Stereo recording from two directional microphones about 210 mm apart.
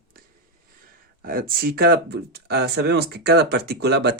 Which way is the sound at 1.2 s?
45° right (ahead or behind).